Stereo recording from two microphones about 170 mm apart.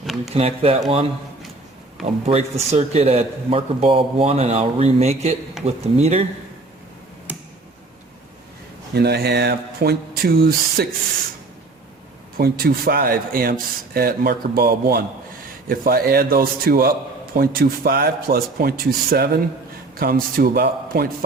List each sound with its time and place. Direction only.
0.3 s a man's voice: 35° right (ahead or behind)
2.2 s a man's voice: 40° right (ahead or behind)
8.9 s speech: 70° right (ahead or behind)
12.4 s speech: 60° right (ahead or behind)